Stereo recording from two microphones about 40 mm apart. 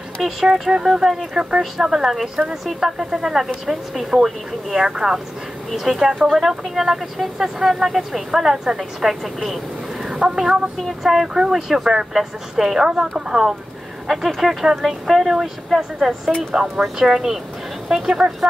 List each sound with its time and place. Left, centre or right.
0.2 s speech: centre
1.0 s speech: centre
16.5 s speech: centre